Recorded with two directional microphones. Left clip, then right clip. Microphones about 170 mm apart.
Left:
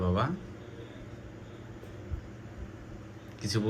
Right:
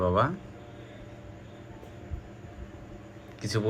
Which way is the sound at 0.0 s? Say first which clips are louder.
Right 6 dB; centre (ahead or behind).